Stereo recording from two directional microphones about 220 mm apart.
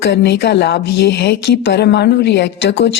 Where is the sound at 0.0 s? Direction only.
50° left (ahead or behind).